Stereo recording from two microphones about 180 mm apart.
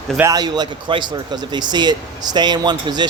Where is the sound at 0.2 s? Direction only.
20° right (ahead or behind).